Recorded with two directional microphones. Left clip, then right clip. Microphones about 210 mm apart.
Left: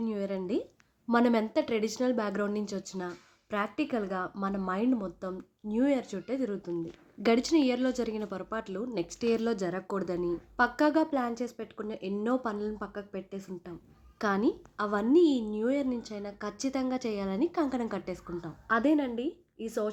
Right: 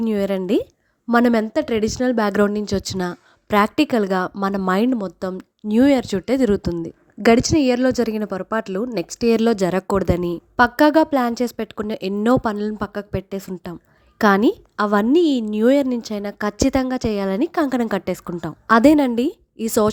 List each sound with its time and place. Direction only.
0.0 s a woman's voice: 45° right (ahead or behind)